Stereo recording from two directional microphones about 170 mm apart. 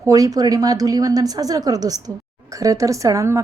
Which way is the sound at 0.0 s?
20° right (ahead or behind).